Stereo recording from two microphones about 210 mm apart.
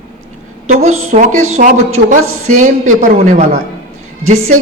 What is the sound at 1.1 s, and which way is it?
A man's voice, 35° right (ahead or behind).